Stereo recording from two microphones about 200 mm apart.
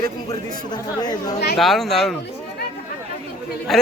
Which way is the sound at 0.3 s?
20° left (ahead or behind).